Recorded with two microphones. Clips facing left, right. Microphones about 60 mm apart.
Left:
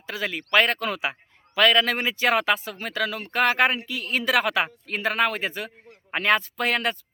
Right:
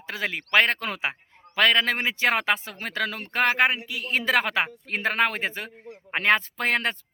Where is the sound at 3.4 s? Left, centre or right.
Centre.